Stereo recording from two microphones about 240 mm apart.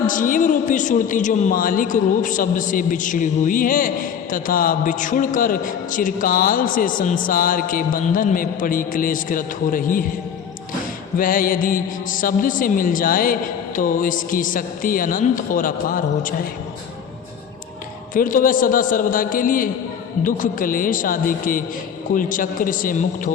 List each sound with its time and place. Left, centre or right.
0.1 s a woman's voice: left
11.2 s a woman's voice: left
18.1 s a woman's voice: left